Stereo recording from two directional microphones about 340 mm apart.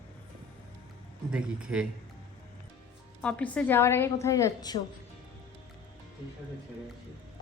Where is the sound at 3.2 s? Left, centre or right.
Centre.